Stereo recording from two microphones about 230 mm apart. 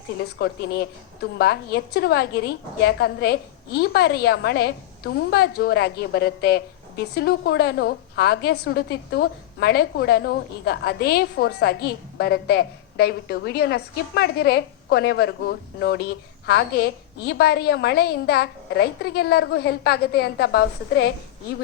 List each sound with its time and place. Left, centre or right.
0.2 s a woman's voice: left